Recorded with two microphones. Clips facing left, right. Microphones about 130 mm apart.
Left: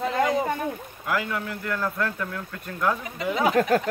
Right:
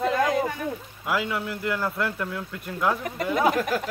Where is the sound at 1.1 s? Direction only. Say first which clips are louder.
Right 1 dB; 10° right (ahead or behind).